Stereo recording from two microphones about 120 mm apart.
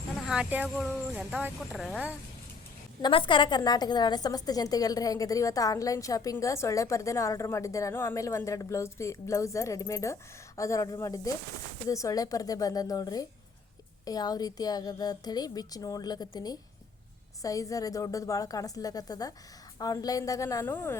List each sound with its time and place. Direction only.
0.3 s speech: 10° right (ahead or behind)
3.0 s a woman's voice: 45° left (ahead or behind); by 21.0 s 20° left (ahead or behind)